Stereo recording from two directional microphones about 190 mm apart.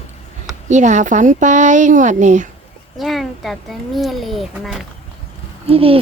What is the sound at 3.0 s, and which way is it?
A child's voice, centre (ahead or behind).